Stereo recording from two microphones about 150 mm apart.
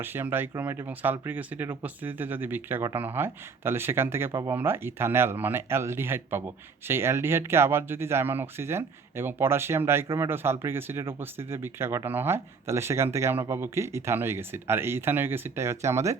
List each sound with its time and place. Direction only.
0.0 s speech: 15° right (ahead or behind)